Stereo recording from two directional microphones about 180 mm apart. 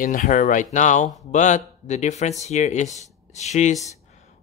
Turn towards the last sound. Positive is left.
turn(degrees=40)  # may be behind; listen again after turning